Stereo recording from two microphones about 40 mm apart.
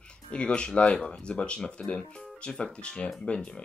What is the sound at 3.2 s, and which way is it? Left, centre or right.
Speech, centre.